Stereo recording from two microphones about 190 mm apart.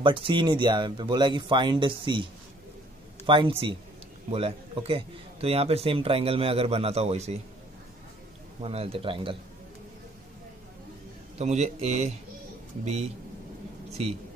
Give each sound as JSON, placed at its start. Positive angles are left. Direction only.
{"t": 0.0, "sound": "speech", "side_deg": -25}
{"t": 3.3, "sound": "speech", "side_deg": -25}
{"t": 8.5, "sound": "speech", "side_deg": -30}
{"t": 11.3, "sound": "speech", "side_deg": -35}
{"t": 14.0, "sound": "speech", "side_deg": -35}